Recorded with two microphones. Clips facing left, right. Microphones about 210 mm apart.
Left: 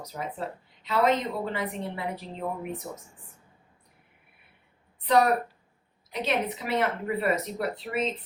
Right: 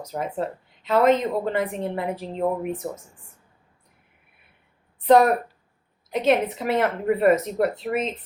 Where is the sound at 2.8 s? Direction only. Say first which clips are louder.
Right 7 dB; 65° right (ahead or behind).